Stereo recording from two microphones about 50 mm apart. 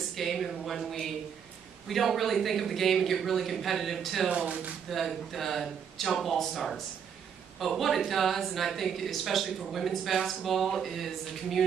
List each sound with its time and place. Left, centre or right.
0.1 s speech: centre
4.3 s speech: right
4.8 s speech: centre